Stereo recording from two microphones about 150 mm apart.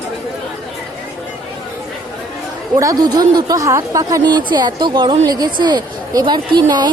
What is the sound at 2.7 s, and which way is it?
Speech, 25° right (ahead or behind).